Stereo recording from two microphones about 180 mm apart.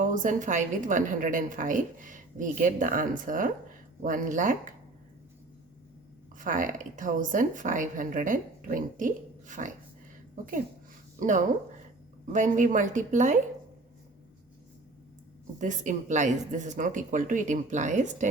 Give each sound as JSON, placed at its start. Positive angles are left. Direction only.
{"t": 0.0, "sound": "a woman's voice", "side_deg": -45}
{"t": 6.4, "sound": "a woman's voice", "side_deg": -45}
{"t": 15.5, "sound": "a woman's voice", "side_deg": -45}